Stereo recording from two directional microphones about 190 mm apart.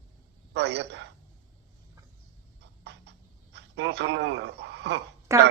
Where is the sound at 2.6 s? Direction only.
65° right (ahead or behind).